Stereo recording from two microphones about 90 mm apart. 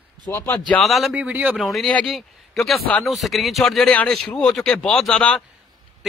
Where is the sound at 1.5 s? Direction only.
Centre (ahead or behind).